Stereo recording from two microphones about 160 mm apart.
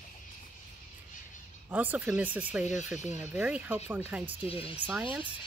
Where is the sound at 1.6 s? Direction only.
10° right (ahead or behind).